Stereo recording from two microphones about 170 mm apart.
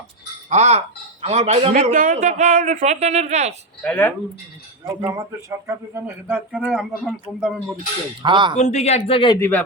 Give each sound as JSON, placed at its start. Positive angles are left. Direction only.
{"t": 0.5, "sound": "a man's voice", "side_deg": -40}
{"t": 3.8, "sound": "speech", "side_deg": 5}
{"t": 4.9, "sound": "speech", "side_deg": -20}
{"t": 8.2, "sound": "speech", "side_deg": -25}
{"t": 8.5, "sound": "speech", "side_deg": 40}
{"t": 9.4, "sound": "speech", "side_deg": 10}